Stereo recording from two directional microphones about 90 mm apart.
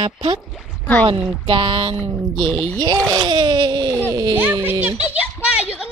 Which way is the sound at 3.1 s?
55° right (ahead or behind).